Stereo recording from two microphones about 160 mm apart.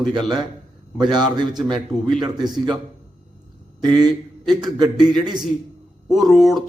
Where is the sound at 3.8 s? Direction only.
25° right (ahead or behind).